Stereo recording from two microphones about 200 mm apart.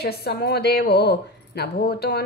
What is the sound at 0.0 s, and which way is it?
A woman's voice, 50° left (ahead or behind).